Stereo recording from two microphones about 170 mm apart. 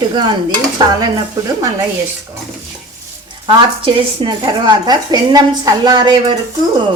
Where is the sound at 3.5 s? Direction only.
30° right (ahead or behind).